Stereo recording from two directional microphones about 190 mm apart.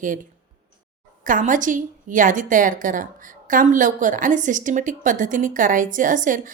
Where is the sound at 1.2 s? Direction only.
45° right (ahead or behind).